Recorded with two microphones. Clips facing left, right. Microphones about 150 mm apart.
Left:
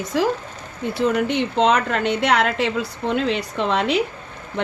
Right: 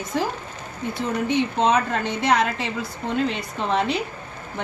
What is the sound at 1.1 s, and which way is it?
Speech, 75° left (ahead or behind).